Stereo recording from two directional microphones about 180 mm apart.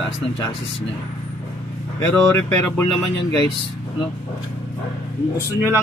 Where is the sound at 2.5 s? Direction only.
15° left (ahead or behind).